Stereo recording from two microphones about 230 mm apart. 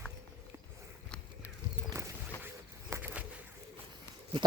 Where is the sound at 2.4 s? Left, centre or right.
Centre.